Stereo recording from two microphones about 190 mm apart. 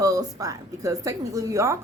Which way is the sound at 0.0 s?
20° right (ahead or behind).